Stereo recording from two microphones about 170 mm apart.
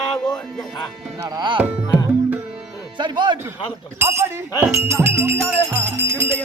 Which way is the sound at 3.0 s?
25° right (ahead or behind).